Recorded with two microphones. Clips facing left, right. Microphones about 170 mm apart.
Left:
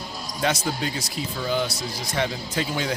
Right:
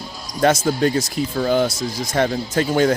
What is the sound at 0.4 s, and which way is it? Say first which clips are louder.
Speech: right 9 dB; 45° right (ahead or behind).